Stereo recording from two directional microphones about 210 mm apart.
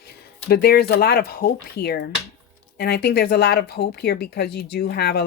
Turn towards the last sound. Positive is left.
turn(degrees=50)  # may be behind; listen again after turning